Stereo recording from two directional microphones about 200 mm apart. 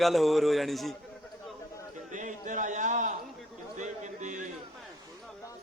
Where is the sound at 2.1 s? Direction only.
40° right (ahead or behind).